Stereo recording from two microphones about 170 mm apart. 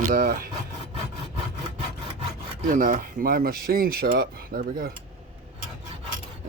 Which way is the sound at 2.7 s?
50° right (ahead or behind).